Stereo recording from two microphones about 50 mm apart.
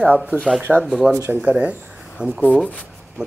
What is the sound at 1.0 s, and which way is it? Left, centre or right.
Speech, right.